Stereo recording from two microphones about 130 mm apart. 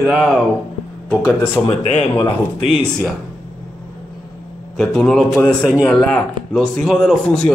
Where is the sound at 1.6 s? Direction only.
50° left (ahead or behind).